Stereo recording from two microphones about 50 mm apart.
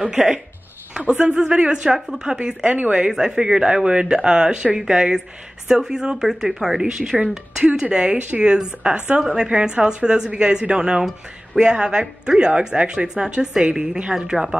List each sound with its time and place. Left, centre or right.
0.0 s a woman's voice: centre
2.0 s speech: centre
2.2 s speech: centre
3.1 s a woman's voice: centre